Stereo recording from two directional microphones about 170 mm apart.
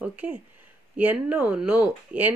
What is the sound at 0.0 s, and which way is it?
Speech, 10° right (ahead or behind).